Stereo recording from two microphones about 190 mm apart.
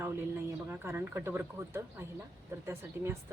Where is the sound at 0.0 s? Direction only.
10° right (ahead or behind).